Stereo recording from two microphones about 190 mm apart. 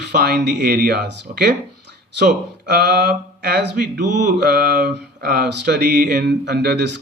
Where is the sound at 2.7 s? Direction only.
55° right (ahead or behind).